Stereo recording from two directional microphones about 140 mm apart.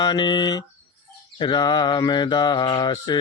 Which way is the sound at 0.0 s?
30° left (ahead or behind).